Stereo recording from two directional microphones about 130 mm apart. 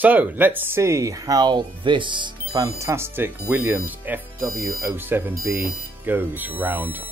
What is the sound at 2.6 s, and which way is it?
Speech, 20° right (ahead or behind).